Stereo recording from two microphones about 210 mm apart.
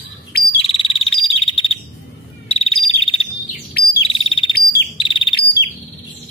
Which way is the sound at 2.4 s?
30° left (ahead or behind).